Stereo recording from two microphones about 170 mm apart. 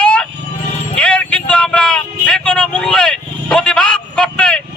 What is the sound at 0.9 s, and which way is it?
Vehicle, 5° left (ahead or behind).